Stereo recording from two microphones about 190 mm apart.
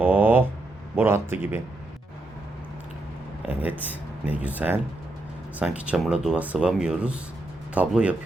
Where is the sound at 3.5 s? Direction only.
10° right (ahead or behind).